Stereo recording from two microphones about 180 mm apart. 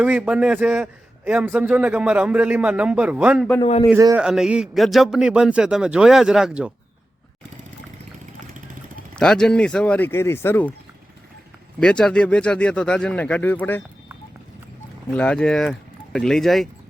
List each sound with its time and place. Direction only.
0.0 s a man's voice: 5° right (ahead or behind)
3.6 s a man's voice: 35° left (ahead or behind)
3.8 s a man's voice: 15° right (ahead or behind)
4.2 s a man's voice: 5° right (ahead or behind)
9.1 s speech: 5° left (ahead or behind)
11.8 s a man's voice: 5° left (ahead or behind)
15.1 s a man's voice: 5° left (ahead or behind)